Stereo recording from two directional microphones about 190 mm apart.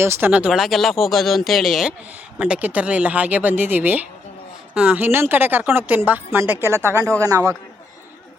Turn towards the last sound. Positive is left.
turn(degrees=-15)  # may be behind; listen again after turning